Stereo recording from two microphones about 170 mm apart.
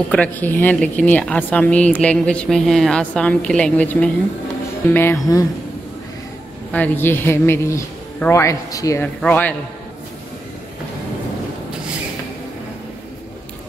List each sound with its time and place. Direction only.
0.1 s speech: 10° left (ahead or behind)
5.2 s speech: 20° left (ahead or behind)
6.7 s speech: 10° left (ahead or behind)